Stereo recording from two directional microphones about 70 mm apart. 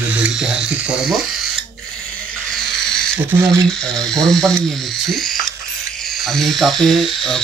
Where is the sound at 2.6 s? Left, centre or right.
Centre.